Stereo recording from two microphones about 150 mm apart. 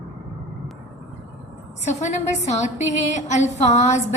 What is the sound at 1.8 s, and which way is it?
A woman's voice, 50° left (ahead or behind).